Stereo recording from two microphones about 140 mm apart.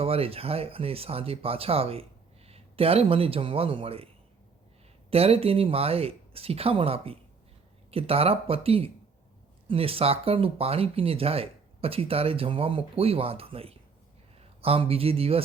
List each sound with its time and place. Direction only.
0.0 s speech: 45° right (ahead or behind)
5.1 s speech: 45° right (ahead or behind)